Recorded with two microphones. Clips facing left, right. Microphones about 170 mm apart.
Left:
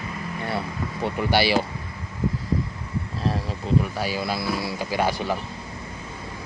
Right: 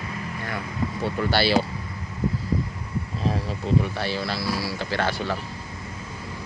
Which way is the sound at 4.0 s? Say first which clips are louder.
Left 1 dB; 10° left (ahead or behind).